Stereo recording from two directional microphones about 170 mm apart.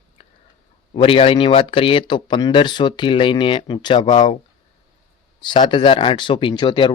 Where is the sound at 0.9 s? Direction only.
30° left (ahead or behind).